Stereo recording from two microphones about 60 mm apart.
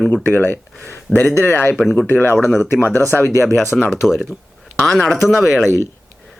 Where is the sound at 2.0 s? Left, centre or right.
Left.